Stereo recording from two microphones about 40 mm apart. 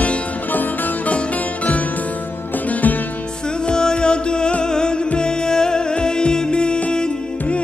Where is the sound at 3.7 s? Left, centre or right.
Left.